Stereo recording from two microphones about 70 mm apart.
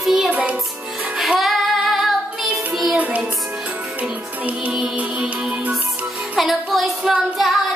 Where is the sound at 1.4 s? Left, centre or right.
Centre.